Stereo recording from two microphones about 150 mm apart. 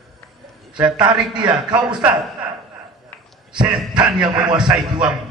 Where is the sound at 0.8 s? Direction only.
5° right (ahead or behind).